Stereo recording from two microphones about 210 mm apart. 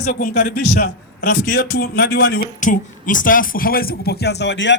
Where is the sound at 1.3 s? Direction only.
65° left (ahead or behind).